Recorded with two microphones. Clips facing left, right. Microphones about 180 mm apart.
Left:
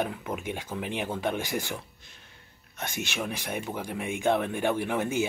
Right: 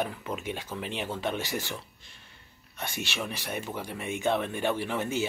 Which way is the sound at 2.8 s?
15° left (ahead or behind).